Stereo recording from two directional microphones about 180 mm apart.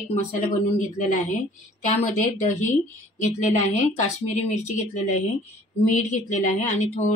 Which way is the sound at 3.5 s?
40° left (ahead or behind).